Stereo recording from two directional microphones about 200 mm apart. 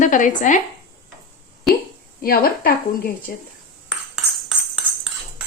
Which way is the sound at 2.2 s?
50° left (ahead or behind).